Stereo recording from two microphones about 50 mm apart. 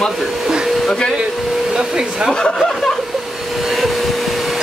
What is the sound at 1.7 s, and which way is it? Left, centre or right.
Hair dryer, centre.